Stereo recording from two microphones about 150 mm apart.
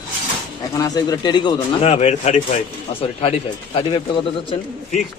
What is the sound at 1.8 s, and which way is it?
Speech, 45° left (ahead or behind).